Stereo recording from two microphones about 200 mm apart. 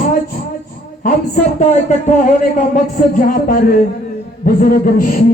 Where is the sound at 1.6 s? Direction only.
35° left (ahead or behind).